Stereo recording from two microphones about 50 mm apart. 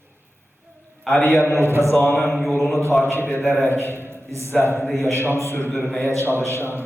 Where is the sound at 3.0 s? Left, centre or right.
Left.